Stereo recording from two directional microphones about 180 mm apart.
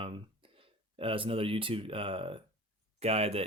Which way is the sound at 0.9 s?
30° right (ahead or behind).